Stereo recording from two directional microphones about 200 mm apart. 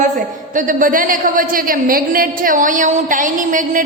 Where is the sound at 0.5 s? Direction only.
40° right (ahead or behind).